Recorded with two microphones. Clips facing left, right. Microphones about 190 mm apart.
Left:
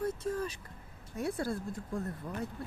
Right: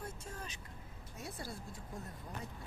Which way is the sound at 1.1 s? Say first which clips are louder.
Left 12 dB; 60° left (ahead or behind).